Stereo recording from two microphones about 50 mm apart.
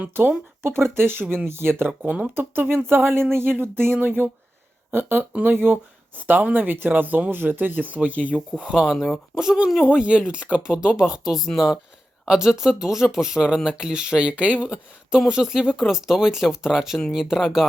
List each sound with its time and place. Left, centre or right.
0.6 s speech: right
1.9 s speech: right
2.3 s speech: right
5.3 s speech: right
8.5 s speech: centre
9.9 s speech: centre